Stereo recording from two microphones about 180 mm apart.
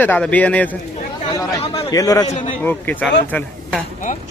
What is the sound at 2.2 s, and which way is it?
Speech, 40° left (ahead or behind).